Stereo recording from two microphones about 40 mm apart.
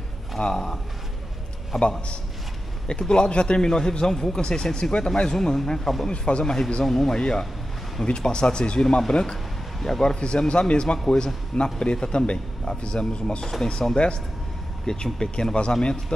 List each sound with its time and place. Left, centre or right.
0.4 s a man's voice: centre
1.8 s a man's voice: left
5.3 s a man's voice: centre
6.0 s a man's voice: left
6.4 s a man's voice: centre
7.2 s a man's voice: centre
8.8 s a man's voice: centre
9.1 s a man's voice: centre
9.8 s a man's voice: centre
10.1 s a man's voice: left
13.4 s a man's voice: centre
13.9 s a man's voice: left
15.1 s a man's voice: centre